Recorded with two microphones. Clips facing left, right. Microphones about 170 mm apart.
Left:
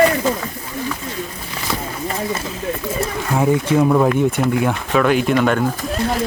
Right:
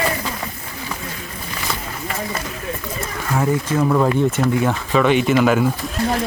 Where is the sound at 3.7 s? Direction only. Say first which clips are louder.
Left 2 dB; 10° left (ahead or behind).